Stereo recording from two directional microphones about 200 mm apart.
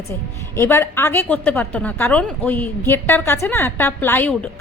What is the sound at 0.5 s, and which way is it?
A woman's voice, 15° left (ahead or behind).